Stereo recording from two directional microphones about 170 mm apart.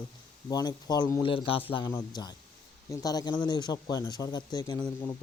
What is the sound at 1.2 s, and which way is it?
A man's voice, 30° left (ahead or behind).